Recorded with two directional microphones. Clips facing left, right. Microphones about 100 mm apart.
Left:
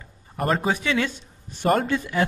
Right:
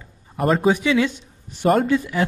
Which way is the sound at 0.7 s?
10° right (ahead or behind).